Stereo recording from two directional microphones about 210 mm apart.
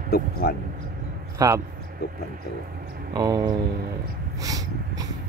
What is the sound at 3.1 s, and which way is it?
Speech, 15° right (ahead or behind).